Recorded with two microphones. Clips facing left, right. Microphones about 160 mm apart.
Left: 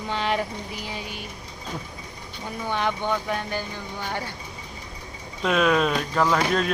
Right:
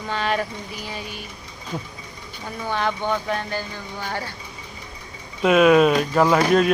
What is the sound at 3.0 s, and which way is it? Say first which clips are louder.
Speech: right 2 dB; 15° right (ahead or behind).